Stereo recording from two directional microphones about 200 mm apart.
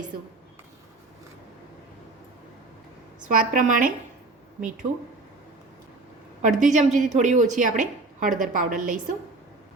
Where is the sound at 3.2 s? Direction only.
40° right (ahead or behind).